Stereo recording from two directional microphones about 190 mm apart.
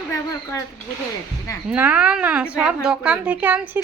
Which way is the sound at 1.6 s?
10° right (ahead or behind).